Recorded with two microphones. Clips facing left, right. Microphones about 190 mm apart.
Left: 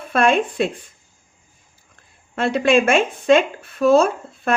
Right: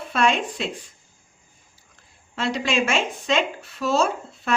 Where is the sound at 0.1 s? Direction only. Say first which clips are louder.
Left 5 dB; 55° left (ahead or behind).